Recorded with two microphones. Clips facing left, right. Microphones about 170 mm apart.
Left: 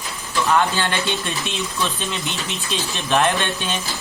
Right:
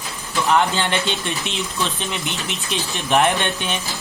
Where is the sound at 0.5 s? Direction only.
20° right (ahead or behind).